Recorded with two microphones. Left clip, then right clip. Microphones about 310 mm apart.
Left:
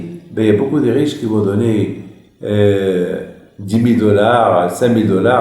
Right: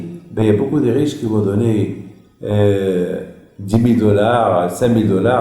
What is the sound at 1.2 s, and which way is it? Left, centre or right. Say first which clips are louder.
Speech: left 2 dB; centre.